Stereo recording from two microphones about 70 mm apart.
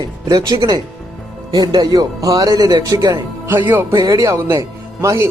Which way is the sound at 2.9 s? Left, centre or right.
Right.